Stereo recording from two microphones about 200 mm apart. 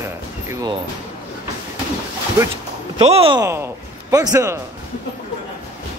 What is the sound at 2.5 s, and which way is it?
Speech, 30° right (ahead or behind).